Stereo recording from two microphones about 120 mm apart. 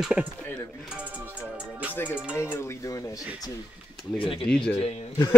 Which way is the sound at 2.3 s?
20° left (ahead or behind).